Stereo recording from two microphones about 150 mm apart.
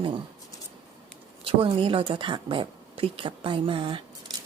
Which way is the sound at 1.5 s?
35° right (ahead or behind).